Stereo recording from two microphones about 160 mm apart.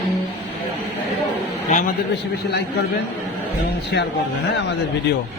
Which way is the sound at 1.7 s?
50° left (ahead or behind).